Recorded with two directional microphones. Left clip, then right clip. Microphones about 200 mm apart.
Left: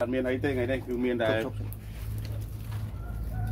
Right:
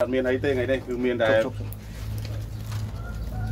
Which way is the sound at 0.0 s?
25° left (ahead or behind).